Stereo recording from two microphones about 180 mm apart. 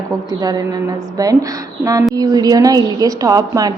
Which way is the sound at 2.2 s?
20° right (ahead or behind).